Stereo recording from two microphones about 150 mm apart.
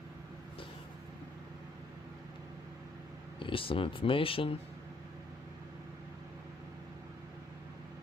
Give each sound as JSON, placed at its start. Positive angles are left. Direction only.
{"t": 3.4, "sound": "speech", "side_deg": 35}